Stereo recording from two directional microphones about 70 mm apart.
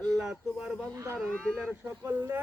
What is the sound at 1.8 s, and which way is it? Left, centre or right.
Speech, right.